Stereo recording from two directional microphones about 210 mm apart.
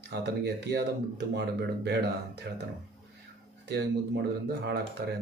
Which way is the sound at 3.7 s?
55° right (ahead or behind).